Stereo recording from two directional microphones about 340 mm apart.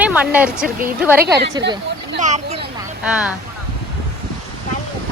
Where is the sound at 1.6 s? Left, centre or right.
Right.